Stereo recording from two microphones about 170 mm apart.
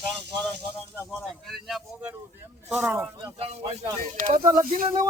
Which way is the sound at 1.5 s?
Centre (ahead or behind).